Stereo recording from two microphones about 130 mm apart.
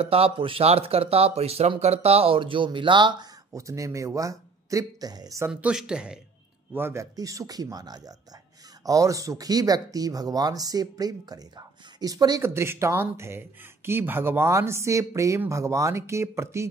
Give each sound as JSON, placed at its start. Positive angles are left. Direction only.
{"t": 0.0, "sound": "speech", "side_deg": -50}
{"t": 3.5, "sound": "speech", "side_deg": -25}
{"t": 5.5, "sound": "speech", "side_deg": -5}
{"t": 6.7, "sound": "speech", "side_deg": -20}